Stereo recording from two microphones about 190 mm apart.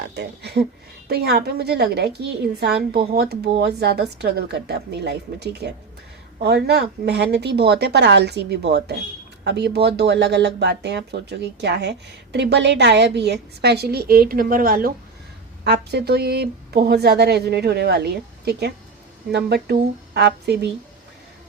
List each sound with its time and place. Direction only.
0.1 s speech: 60° right (ahead or behind)
15.6 s speech: 60° right (ahead or behind)